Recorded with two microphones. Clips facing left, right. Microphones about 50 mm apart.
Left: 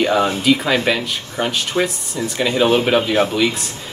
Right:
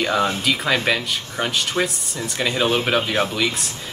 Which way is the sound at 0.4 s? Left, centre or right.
Centre.